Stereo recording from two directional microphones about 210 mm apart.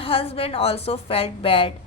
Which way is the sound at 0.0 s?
25° left (ahead or behind).